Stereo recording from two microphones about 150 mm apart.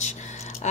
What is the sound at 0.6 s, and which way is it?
Keys jangling, 50° left (ahead or behind).